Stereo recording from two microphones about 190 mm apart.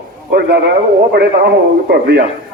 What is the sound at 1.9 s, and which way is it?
Speech, 55° right (ahead or behind).